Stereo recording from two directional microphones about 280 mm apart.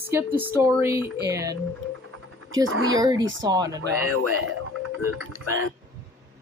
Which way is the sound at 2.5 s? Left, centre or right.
Right.